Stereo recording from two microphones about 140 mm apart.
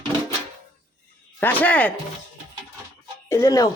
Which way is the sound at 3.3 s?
20° left (ahead or behind).